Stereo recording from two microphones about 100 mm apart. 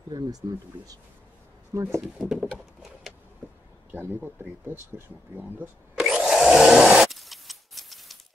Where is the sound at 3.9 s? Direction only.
20° right (ahead or behind).